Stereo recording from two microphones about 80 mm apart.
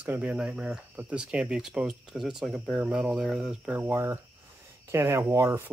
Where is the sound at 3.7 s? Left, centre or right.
Right.